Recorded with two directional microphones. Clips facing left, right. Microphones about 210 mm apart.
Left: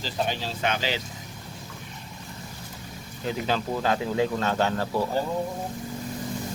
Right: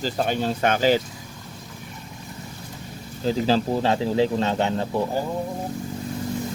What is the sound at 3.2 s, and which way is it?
Speech, 30° right (ahead or behind).